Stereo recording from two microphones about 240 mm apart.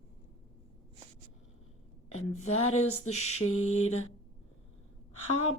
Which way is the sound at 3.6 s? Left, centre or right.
Left.